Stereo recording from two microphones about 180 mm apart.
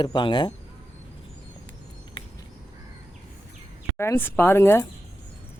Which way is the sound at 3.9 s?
15° left (ahead or behind).